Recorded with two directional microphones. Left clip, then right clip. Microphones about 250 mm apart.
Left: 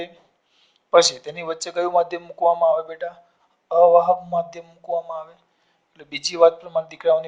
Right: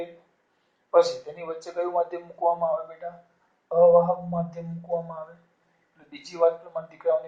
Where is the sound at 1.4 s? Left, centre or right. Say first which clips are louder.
Left 8 dB; left.